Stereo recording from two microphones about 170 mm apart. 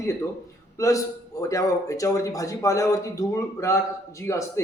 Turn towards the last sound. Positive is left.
turn(degrees=20)  # may be behind; listen again after turning